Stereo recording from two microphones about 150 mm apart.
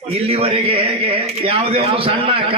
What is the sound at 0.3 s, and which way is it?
A man's voice, 40° right (ahead or behind).